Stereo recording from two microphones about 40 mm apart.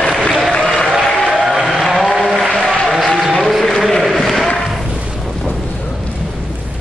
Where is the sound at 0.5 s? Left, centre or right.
Centre.